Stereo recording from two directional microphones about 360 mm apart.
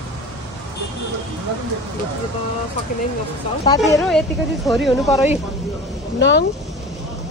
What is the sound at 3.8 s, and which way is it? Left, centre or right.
Speech, centre.